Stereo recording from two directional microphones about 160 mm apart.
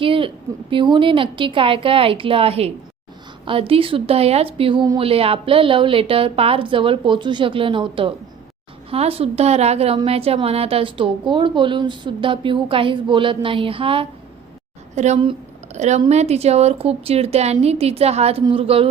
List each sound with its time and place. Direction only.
0.0 s a sound: 35° right (ahead or behind)
0.7 s a woman's voice: 30° right (ahead or behind)
14.9 s a woman's voice: 45° right (ahead or behind)